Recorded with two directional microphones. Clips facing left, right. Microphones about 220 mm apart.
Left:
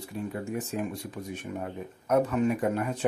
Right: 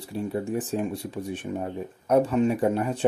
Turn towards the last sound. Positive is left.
turn(degrees=-30)  # may be behind; listen again after turning